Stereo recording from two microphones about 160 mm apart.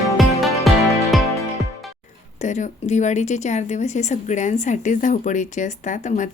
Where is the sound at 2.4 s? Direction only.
50° left (ahead or behind).